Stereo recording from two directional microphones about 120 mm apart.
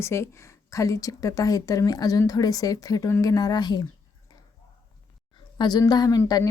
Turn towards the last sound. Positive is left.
turn(degrees=30)  # may be behind; listen again after turning